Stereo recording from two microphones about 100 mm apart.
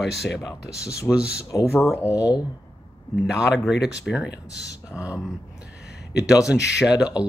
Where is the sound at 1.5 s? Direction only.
30° left (ahead or behind).